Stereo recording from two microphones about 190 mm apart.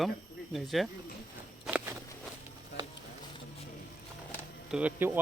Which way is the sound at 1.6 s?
10° right (ahead or behind).